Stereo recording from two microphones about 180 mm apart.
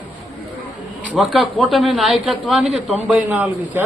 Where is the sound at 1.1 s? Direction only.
Centre (ahead or behind).